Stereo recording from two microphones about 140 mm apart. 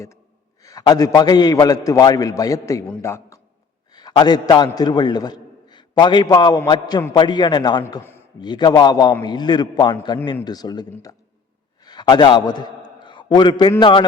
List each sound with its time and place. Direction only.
0.6 s a man's voice: 25° left (ahead or behind)